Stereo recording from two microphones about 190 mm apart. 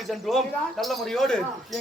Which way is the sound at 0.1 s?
Centre (ahead or behind).